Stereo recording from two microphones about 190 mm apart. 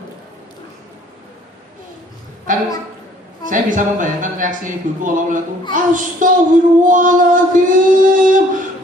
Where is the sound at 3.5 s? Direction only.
45° right (ahead or behind).